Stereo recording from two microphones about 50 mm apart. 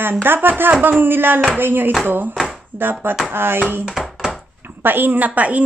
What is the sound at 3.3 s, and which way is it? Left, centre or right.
A woman's voice, right.